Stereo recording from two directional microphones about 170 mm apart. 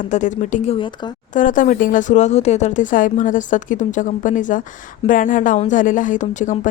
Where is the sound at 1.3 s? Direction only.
50° left (ahead or behind).